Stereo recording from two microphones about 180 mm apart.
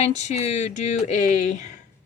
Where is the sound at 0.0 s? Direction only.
40° left (ahead or behind).